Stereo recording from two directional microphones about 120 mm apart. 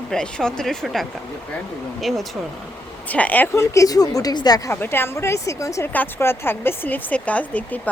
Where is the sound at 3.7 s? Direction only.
30° left (ahead or behind).